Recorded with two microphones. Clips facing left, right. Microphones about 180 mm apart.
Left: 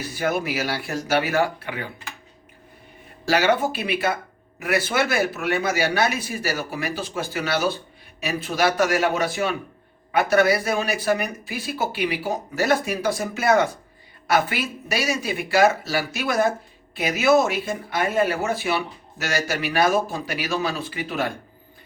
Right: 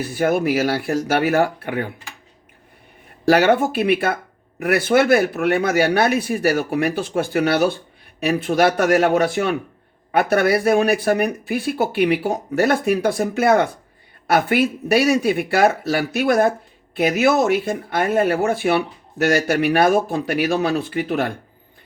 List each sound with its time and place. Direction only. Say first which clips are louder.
0.0 s speech: right 6 dB; 55° right (ahead or behind)
3.2 s speech: right 5 dB; 55° right (ahead or behind)